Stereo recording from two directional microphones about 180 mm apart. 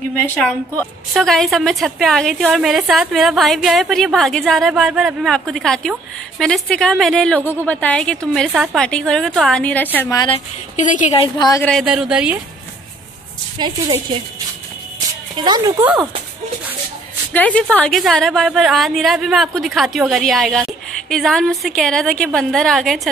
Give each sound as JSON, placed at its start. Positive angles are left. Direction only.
{"t": 0.4, "sound": "a woman's voice", "side_deg": 5}
{"t": 10.8, "sound": "a woman's voice", "side_deg": 45}
{"t": 11.8, "sound": "a woman's voice", "side_deg": -5}
{"t": 13.6, "sound": "speech", "side_deg": -25}
{"t": 15.3, "sound": "speech", "side_deg": -25}
{"t": 17.3, "sound": "a woman's voice", "side_deg": 10}